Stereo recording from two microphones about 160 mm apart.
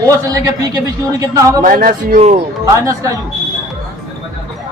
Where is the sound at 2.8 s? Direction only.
20° right (ahead or behind).